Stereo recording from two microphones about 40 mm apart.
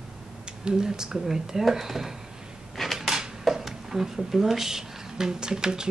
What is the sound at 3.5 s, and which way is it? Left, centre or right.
Speech, centre.